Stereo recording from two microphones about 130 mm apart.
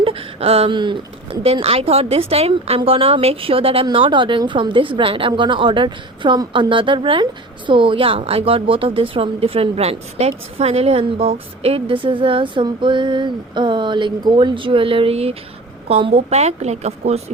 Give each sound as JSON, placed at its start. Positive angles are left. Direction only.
{"t": 0.0, "sound": "a woman's voice", "side_deg": -45}